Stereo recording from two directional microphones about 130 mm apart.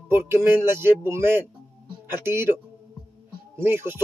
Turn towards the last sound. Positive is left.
turn(degrees=-15)  # may be behind; listen again after turning